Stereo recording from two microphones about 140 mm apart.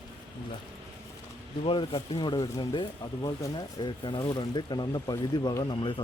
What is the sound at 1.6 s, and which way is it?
Speech, 40° left (ahead or behind).